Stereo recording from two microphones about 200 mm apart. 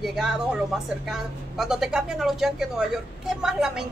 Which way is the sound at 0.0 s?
Centre (ahead or behind).